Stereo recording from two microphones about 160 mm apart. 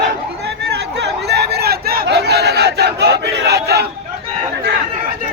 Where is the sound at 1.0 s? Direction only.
90° right.